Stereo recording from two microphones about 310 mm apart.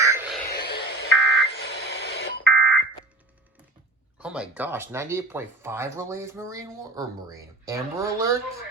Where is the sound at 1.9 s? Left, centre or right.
Left.